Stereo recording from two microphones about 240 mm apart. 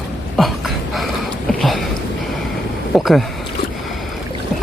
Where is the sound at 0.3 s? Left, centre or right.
Centre.